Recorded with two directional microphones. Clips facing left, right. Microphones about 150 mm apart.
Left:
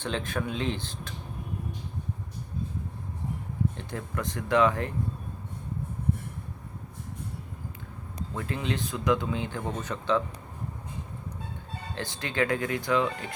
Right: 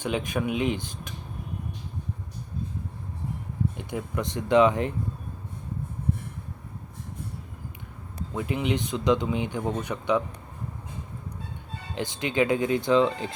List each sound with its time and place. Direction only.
0.0 s speech: 15° right (ahead or behind)
3.8 s speech: 15° right (ahead or behind)
8.3 s speech: 15° right (ahead or behind)
11.9 s speech: 20° right (ahead or behind)